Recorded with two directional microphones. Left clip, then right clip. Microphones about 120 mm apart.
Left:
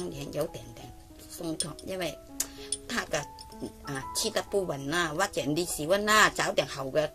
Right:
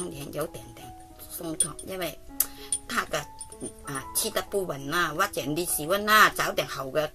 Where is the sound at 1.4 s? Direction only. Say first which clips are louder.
Right 1 dB; 15° left (ahead or behind).